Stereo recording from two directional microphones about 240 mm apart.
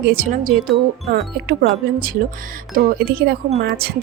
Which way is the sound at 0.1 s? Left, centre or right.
Right.